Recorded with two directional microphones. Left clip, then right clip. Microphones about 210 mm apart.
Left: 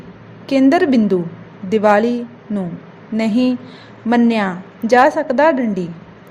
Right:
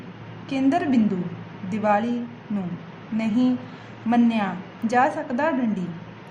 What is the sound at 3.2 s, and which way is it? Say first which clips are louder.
A woman's voice: left 6 dB; 30° left (ahead or behind).